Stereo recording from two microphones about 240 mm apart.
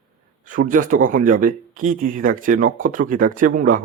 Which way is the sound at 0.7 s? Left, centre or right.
Right.